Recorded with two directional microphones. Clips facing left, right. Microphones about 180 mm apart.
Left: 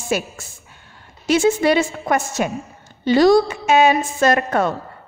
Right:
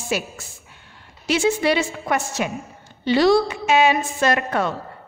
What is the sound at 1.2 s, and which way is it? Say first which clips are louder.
A woman's voice: left 4 dB; 45° left (ahead or behind).